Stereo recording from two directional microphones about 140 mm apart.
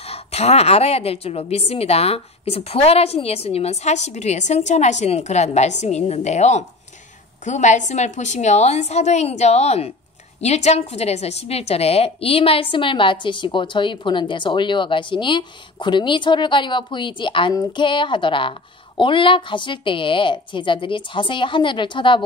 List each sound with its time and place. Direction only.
0.0 s a woman's voice: 45° left (ahead or behind)